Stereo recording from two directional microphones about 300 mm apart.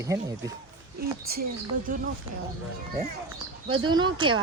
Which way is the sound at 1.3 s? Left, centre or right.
Right.